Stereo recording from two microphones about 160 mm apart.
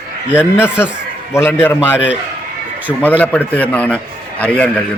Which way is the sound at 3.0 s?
10° left (ahead or behind).